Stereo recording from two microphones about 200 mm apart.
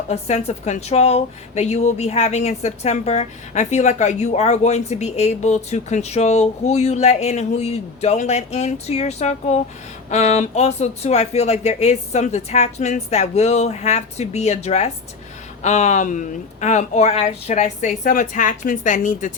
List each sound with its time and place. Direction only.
0.1 s speech: 30° left (ahead or behind)